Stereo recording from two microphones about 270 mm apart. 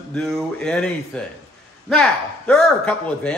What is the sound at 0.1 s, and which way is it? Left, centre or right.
Speech, centre.